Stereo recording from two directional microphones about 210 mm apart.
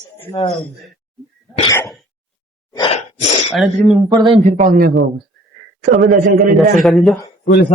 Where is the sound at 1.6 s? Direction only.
15° left (ahead or behind).